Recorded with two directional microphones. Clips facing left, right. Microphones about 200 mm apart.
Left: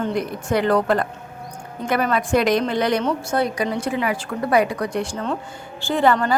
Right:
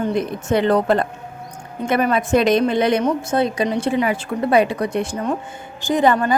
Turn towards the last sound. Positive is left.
turn(degrees=-15)  # may be behind; listen again after turning